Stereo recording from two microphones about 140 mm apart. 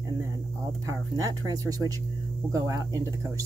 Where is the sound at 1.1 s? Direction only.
25° right (ahead or behind).